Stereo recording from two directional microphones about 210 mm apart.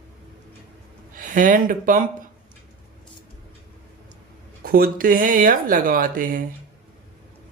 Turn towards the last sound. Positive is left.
turn(degrees=-40)  # may be behind; listen again after turning